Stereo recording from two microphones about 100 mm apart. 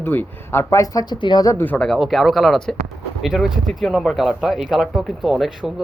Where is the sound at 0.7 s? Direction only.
35° left (ahead or behind).